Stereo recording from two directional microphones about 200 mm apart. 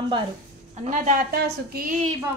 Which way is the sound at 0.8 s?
45° right (ahead or behind).